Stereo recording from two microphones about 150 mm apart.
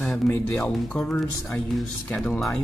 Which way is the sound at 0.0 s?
10° left (ahead or behind).